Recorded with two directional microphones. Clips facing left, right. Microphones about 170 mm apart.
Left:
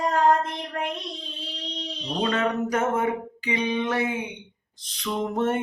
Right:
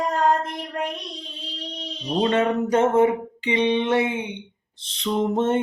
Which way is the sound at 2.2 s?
30° right (ahead or behind).